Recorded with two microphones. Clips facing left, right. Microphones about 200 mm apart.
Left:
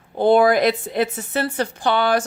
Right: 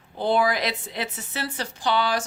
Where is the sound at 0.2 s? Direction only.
50° left (ahead or behind).